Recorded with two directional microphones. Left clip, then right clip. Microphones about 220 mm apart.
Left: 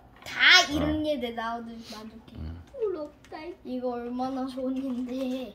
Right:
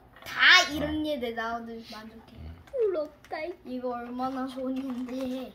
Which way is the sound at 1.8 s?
30° left (ahead or behind).